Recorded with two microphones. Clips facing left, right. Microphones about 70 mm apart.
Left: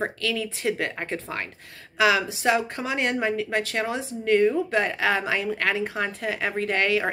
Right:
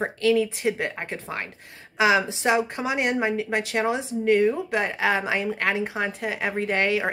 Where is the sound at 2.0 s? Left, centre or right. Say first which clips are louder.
Right 1 dB; right.